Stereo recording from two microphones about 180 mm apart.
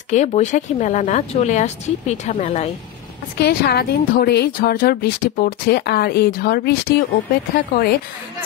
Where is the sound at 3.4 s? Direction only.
60° left (ahead or behind).